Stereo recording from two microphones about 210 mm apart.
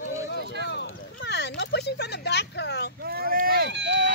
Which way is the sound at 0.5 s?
55° left (ahead or behind).